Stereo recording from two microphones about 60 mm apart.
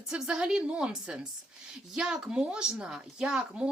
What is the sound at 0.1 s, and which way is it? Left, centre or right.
A woman's voice, centre.